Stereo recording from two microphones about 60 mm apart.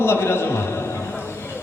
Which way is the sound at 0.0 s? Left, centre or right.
Left.